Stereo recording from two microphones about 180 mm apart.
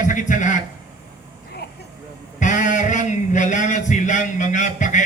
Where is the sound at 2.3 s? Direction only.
45° left (ahead or behind).